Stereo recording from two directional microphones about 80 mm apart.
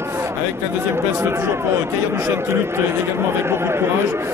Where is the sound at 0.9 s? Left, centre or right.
Right.